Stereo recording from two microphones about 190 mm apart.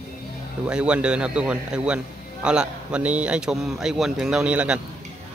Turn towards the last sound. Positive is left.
turn(degrees=-5)  # may be behind; listen again after turning